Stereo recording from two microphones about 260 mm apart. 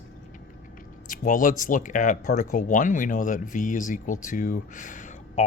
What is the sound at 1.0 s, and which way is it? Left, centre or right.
Speech, left.